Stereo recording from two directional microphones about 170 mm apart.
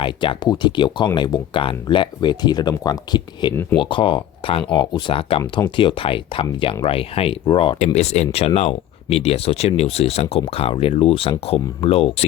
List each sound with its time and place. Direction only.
0.0 s speech: 30° left (ahead or behind)
5.4 s speech: 20° left (ahead or behind)
5.7 s speech: 30° left (ahead or behind)